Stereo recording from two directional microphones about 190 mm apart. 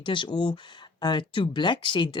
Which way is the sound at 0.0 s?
25° left (ahead or behind).